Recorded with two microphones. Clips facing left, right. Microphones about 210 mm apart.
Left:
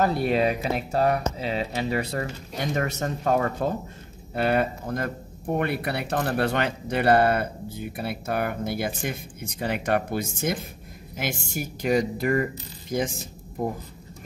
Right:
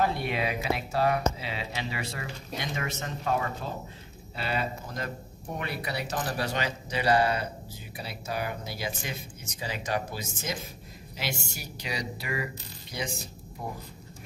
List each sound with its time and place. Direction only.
0.0 s speech: 40° left (ahead or behind)